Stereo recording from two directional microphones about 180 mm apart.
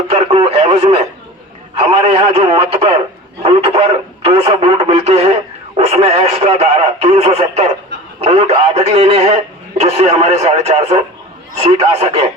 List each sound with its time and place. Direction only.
0.1 s radio: 35° right (ahead or behind)
1.7 s speech: 35° right (ahead or behind)
3.4 s radio: 35° right (ahead or behind)
5.7 s speech: 35° right (ahead or behind)